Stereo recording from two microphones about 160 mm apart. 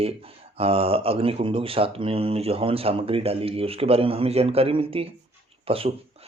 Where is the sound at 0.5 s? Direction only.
35° right (ahead or behind).